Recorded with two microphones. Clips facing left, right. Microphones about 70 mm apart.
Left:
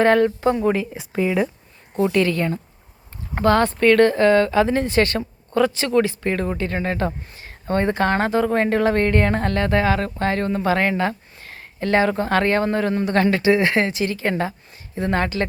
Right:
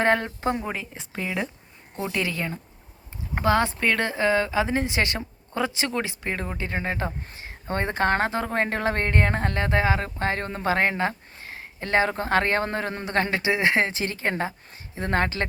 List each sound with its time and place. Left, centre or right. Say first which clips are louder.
0.0 s speech: left 7 dB; right
0.6 s speech: left 11 dB; centre
2.1 s speech: left 8 dB; centre; by 15.4 s right